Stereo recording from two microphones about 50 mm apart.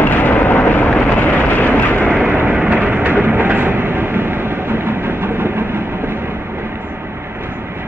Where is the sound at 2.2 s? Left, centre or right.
Right.